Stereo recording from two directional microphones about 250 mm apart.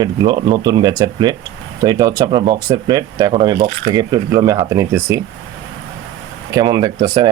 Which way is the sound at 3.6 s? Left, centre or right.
Right.